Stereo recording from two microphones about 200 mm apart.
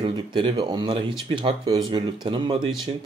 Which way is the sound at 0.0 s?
25° right (ahead or behind).